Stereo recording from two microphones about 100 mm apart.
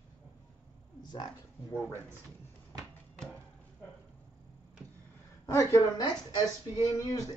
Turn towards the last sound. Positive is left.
turn(degrees=35)  # may be behind; listen again after turning